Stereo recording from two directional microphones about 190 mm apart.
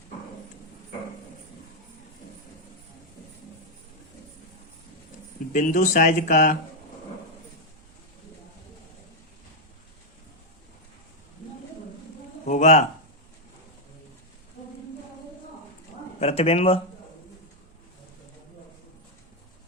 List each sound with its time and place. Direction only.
5.5 s speech: 40° left (ahead or behind)
12.5 s a sound: 40° left (ahead or behind)
16.2 s speech: 35° left (ahead or behind)